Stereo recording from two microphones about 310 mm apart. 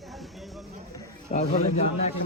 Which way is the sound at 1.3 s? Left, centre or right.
Centre.